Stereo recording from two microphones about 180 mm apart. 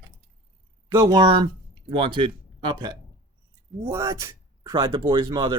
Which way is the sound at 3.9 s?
15° right (ahead or behind).